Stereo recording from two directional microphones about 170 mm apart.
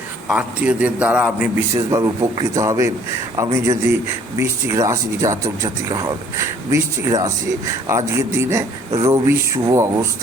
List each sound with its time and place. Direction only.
0.3 s speech: 5° right (ahead or behind)
1.7 s a man's voice: 20° right (ahead or behind)